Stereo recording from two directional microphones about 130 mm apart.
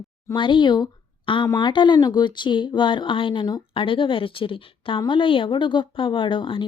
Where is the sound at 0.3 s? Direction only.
40° left (ahead or behind).